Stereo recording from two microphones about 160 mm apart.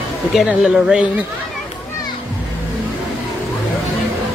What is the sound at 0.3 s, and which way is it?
Speech, 5° right (ahead or behind).